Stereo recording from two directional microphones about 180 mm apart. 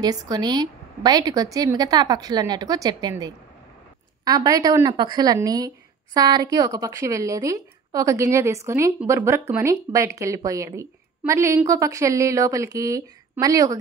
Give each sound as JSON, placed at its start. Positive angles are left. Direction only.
{"t": 0.0, "sound": "a woman's voice", "side_deg": -20}